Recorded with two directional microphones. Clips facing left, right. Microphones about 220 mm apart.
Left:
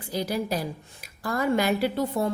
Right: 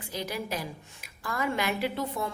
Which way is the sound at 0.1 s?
35° left (ahead or behind).